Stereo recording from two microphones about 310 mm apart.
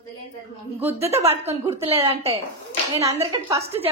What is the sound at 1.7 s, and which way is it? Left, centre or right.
A woman's voice, centre.